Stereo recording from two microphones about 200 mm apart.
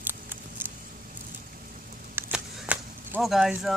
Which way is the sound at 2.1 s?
5° right (ahead or behind).